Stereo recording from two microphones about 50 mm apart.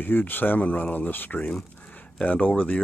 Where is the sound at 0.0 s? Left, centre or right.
Left.